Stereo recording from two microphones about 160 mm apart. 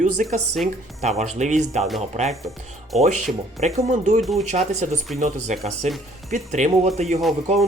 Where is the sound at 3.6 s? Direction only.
50° right (ahead or behind).